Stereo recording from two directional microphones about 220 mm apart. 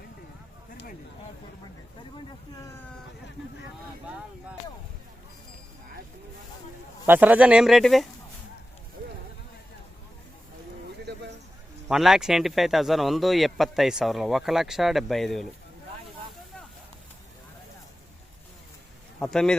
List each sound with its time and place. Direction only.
0.7 s a sound: 40° left (ahead or behind)
7.0 s speech: 10° right (ahead or behind)
11.9 s speech: centre (ahead or behind)
19.2 s speech: 5° left (ahead or behind)